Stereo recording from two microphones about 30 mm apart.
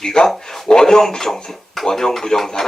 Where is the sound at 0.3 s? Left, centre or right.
Centre.